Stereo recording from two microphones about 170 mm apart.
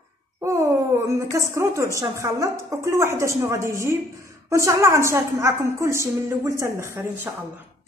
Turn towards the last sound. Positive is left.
turn(degrees=-15)  # may be behind; listen again after turning